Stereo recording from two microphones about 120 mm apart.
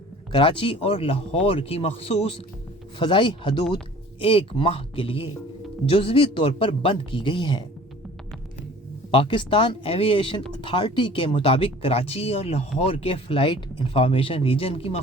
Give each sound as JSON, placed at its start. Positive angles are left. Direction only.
{"t": 0.3, "sound": "speech", "side_deg": 45}
{"t": 9.1, "sound": "speech", "side_deg": 45}